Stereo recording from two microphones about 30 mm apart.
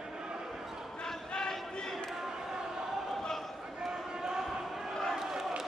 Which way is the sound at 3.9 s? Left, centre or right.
Centre.